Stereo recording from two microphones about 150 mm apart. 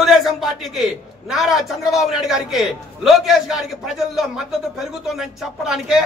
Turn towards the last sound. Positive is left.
turn(degrees=0)  # may be behind; listen again after turning